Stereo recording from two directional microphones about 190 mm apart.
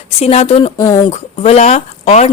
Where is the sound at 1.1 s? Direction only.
35° left (ahead or behind).